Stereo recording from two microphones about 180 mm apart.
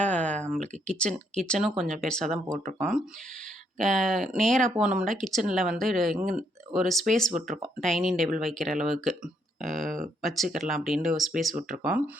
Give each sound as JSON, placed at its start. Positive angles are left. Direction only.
{"t": 0.1, "sound": "a sound", "side_deg": 5}
{"t": 0.9, "sound": "speech", "side_deg": 5}
{"t": 3.8, "sound": "speech", "side_deg": 5}
{"t": 7.3, "sound": "speech", "side_deg": -45}
{"t": 7.6, "sound": "speech", "side_deg": 0}
{"t": 9.7, "sound": "speech", "side_deg": -45}
{"t": 10.2, "sound": "speech", "side_deg": 0}
{"t": 11.5, "sound": "speech", "side_deg": -50}